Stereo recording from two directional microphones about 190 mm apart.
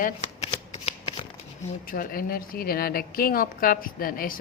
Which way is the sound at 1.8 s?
50° left (ahead or behind).